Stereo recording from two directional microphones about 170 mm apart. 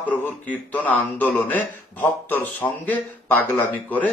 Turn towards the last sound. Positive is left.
turn(degrees=10)  # may be behind; listen again after turning